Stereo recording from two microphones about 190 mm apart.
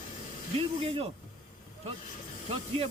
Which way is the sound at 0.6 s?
30° right (ahead or behind).